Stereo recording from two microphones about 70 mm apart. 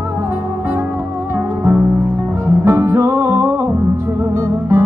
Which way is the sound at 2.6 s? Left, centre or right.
Right.